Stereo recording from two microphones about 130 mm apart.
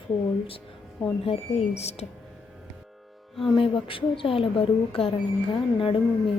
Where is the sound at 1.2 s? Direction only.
50° left (ahead or behind).